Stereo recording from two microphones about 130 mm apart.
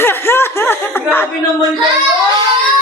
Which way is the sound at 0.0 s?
15° left (ahead or behind).